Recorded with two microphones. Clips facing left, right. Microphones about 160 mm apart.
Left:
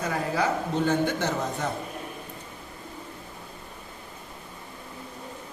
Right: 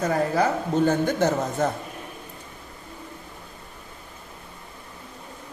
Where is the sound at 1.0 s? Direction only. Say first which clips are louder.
Right 5 dB; 45° right (ahead or behind).